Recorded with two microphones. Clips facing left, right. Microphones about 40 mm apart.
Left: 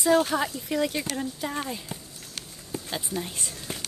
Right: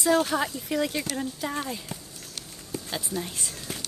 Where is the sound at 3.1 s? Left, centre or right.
Centre.